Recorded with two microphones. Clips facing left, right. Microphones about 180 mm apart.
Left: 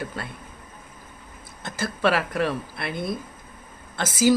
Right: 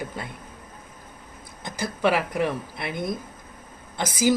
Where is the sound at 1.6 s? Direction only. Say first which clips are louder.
Even; 15° right (ahead or behind).